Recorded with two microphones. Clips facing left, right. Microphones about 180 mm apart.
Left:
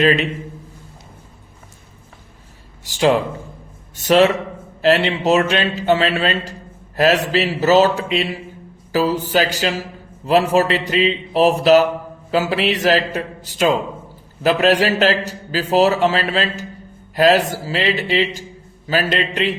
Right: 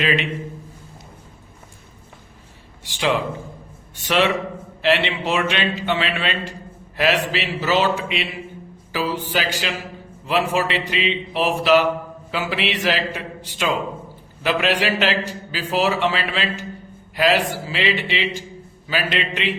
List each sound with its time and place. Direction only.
0.0 s a man's voice: 40° left (ahead or behind)
2.8 s a man's voice: 40° left (ahead or behind)